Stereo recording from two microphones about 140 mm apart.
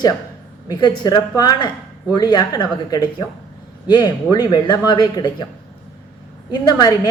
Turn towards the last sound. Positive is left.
turn(degrees=30)  # may be behind; listen again after turning